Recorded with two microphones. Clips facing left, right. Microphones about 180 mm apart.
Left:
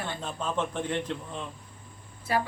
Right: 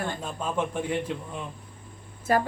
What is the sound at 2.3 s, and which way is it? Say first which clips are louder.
Speech: right 4 dB; 45° right (ahead or behind).